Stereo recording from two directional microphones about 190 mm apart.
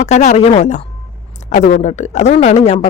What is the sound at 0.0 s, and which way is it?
A woman's voice, 35° left (ahead or behind).